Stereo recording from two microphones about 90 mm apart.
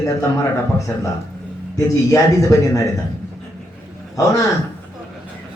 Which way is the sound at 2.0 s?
35° left (ahead or behind).